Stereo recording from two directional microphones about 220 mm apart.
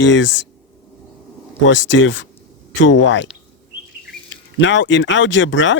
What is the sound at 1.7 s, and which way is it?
Speech, 55° left (ahead or behind).